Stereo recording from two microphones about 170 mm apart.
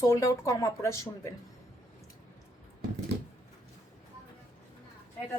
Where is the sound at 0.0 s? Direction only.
20° left (ahead or behind).